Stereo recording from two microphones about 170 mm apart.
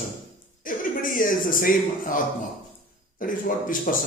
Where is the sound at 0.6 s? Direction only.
55° left (ahead or behind).